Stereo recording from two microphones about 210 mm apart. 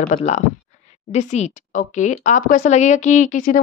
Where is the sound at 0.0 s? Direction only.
35° left (ahead or behind).